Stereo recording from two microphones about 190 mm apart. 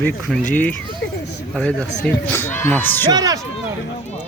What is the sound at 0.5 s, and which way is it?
Speech, 10° left (ahead or behind).